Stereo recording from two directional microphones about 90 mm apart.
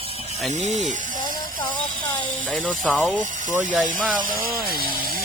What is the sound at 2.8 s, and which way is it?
Speech, centre (ahead or behind).